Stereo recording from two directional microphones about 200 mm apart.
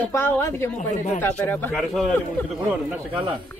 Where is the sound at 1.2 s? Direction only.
10° left (ahead or behind).